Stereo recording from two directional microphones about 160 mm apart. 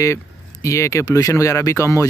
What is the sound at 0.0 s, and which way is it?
Speech, 20° left (ahead or behind).